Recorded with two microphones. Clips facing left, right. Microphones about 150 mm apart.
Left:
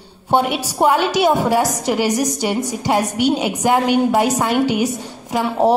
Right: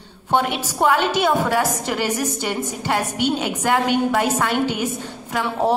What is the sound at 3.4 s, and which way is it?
A woman's voice, 15° left (ahead or behind).